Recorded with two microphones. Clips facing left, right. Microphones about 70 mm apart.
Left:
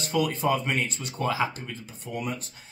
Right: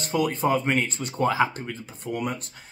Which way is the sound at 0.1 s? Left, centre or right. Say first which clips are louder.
Right 2 dB; right.